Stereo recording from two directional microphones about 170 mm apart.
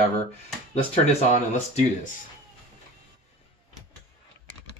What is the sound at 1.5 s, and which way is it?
Speech, 45° left (ahead or behind).